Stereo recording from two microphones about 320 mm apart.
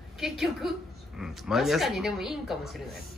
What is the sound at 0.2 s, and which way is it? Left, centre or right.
Speech, centre.